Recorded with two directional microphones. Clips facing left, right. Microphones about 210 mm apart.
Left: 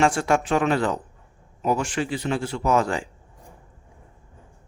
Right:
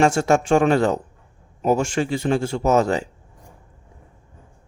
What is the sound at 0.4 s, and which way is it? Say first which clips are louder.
Speech: right 5 dB; 45° right (ahead or behind).